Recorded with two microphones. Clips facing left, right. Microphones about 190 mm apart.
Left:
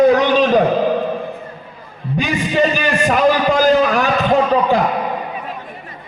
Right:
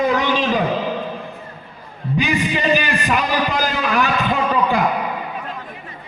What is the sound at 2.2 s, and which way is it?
A man's voice, 45° left (ahead or behind).